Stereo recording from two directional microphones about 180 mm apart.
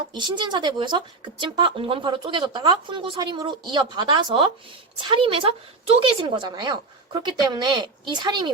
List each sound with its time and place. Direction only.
0.1 s speech: 25° right (ahead or behind)